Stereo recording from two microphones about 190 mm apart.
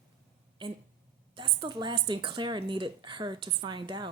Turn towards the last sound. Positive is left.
turn(degrees=-25)  # may be behind; listen again after turning